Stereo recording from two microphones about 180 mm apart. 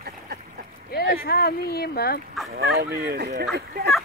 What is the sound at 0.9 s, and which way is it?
Speech, 55° left (ahead or behind).